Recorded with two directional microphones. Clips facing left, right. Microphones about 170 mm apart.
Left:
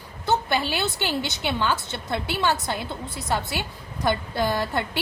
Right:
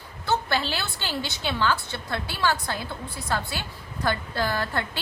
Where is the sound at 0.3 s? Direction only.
20° left (ahead or behind).